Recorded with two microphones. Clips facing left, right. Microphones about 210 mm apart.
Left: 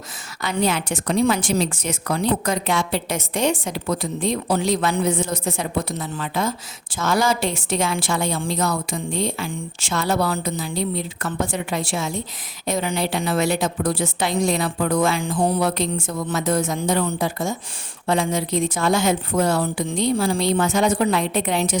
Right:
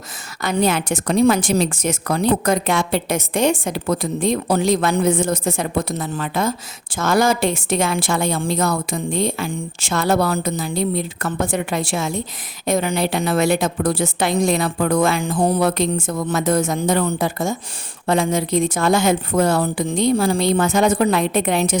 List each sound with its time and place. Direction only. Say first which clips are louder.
0.4 s a woman's voice: right 3 dB; 45° right (ahead or behind)